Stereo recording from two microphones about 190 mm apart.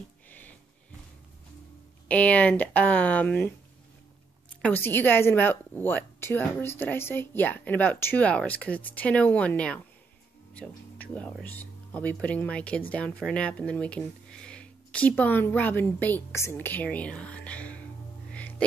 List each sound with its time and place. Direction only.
0.3 s sniff: 10° left (ahead or behind)
2.0 s a woman's voice: 5° left (ahead or behind)
4.6 s a woman's voice: 10° left (ahead or behind)